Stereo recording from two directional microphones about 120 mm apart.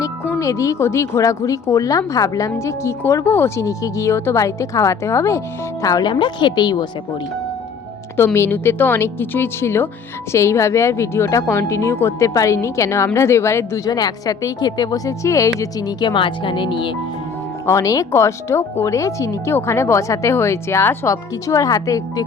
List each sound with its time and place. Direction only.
0.3 s a woman's voice: 25° left (ahead or behind)
8.1 s a woman's voice: 20° left (ahead or behind); by 16.9 s 45° left (ahead or behind)
17.7 s a woman's voice: 25° left (ahead or behind)